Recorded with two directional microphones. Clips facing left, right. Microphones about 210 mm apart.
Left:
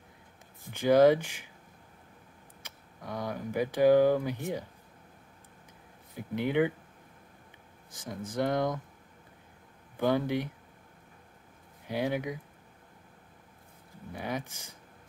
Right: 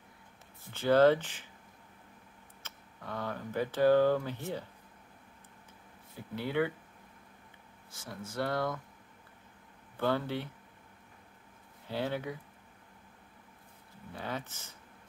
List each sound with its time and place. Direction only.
0.7 s speech: 15° left (ahead or behind)
2.6 s speech: 10° left (ahead or behind)
6.1 s speech: 15° left (ahead or behind)
7.9 s speech: 15° left (ahead or behind)
9.9 s speech: 15° left (ahead or behind)
11.9 s speech: 15° left (ahead or behind)
14.1 s speech: 15° left (ahead or behind)